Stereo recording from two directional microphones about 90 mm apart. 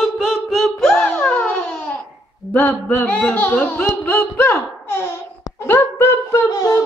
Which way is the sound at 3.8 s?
25° left (ahead or behind).